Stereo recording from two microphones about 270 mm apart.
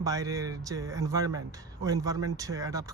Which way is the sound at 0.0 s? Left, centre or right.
Centre.